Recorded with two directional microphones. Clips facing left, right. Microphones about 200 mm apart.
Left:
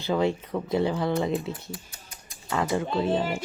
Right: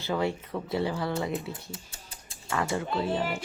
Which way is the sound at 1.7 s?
30° right (ahead or behind).